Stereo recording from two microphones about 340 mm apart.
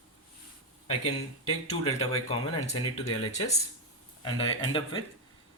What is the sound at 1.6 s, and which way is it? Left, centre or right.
Speech, centre.